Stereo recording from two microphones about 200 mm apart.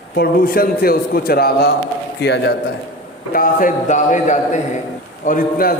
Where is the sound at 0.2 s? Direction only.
50° left (ahead or behind).